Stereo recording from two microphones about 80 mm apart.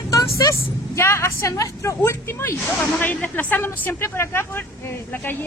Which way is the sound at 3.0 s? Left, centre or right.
Left.